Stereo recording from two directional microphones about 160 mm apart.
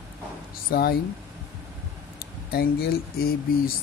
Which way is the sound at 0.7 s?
70° left (ahead or behind).